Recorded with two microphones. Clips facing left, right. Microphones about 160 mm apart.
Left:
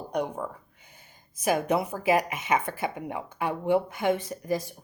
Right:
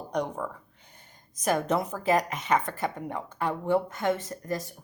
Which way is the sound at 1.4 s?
10° left (ahead or behind).